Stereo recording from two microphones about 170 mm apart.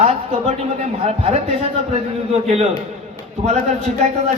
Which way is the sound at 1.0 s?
35° right (ahead or behind).